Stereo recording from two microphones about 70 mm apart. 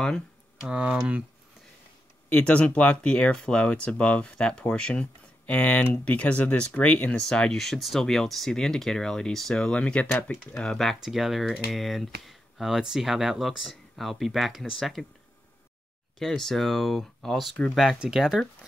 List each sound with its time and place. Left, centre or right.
0.6 s speech: centre
2.2 s speech: left; by 15.0 s centre
16.2 s speech: centre
17.9 s speech: centre